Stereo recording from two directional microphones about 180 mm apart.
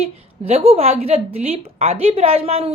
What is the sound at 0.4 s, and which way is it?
A woman's voice, 35° right (ahead or behind).